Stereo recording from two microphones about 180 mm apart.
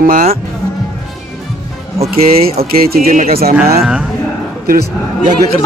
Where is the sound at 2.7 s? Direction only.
55° right (ahead or behind).